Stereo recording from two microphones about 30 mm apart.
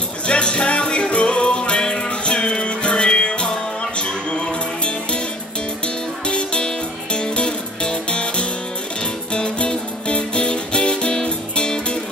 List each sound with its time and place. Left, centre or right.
0.3 s music: left
6.2 s music: left